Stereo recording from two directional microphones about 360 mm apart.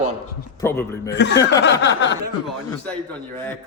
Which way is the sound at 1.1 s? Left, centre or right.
Left.